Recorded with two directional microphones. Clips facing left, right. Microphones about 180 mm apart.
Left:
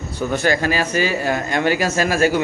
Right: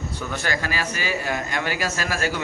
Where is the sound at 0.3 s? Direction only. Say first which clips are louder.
Left 9 dB; 20° left (ahead or behind).